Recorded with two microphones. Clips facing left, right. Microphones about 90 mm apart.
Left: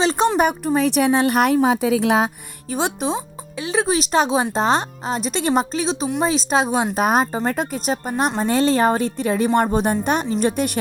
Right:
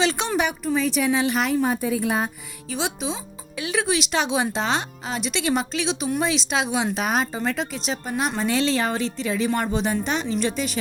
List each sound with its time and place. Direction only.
0.0 s speech: 35° left (ahead or behind)
0.3 s a woman's voice: 50° left (ahead or behind); by 2.3 s 90° left
2.6 s speech: 50° left (ahead or behind)
3.6 s speech: 30° left (ahead or behind); by 10.7 s 55° left (ahead or behind)